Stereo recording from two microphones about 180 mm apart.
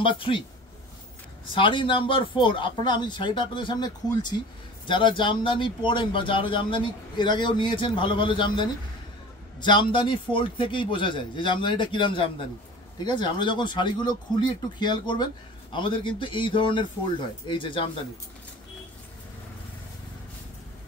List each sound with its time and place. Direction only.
0.0 s speech: 30° left (ahead or behind)
1.5 s speech: 25° left (ahead or behind)